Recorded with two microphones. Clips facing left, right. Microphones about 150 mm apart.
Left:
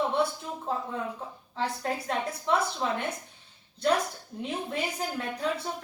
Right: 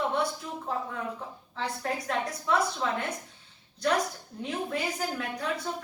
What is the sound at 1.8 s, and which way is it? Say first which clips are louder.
Speech: right 3 dB; 25° left (ahead or behind).